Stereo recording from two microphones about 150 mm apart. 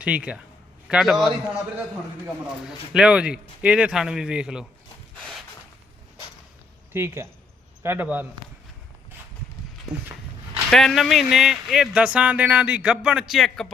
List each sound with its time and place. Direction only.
0.0 s a man's voice: 10° right (ahead or behind)
6.9 s a man's voice: 15° right (ahead or behind)
10.7 s speech: 5° left (ahead or behind)